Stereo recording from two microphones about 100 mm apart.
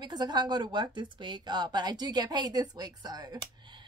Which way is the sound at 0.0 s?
45° right (ahead or behind).